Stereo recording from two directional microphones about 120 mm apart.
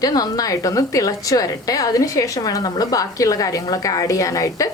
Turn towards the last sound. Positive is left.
turn(degrees=30)  # may be behind; listen again after turning